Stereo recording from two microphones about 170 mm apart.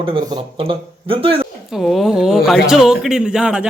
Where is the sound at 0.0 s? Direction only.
25° right (ahead or behind).